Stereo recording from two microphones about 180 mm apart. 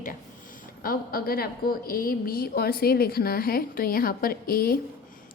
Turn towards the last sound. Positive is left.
turn(degrees=55)  # may be behind; listen again after turning